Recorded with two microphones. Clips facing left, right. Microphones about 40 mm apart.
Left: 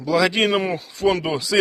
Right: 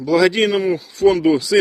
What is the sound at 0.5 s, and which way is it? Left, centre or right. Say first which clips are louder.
Speech: right 3 dB; left.